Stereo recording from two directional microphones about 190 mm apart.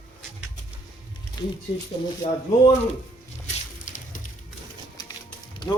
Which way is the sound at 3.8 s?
40° left (ahead or behind).